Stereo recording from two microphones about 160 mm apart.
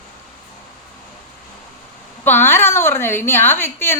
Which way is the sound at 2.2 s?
15° left (ahead or behind).